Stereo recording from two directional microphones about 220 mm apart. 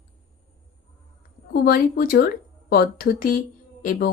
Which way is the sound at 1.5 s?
45° left (ahead or behind).